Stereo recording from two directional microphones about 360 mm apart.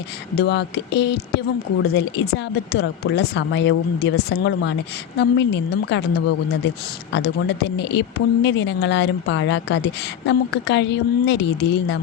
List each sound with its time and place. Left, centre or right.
0.3 s a woman's voice: left
7.1 s a woman's voice: left